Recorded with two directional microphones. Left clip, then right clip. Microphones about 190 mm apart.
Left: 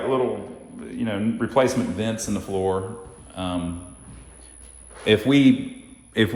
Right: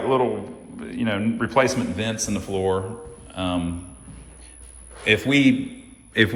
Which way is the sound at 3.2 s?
10° left (ahead or behind).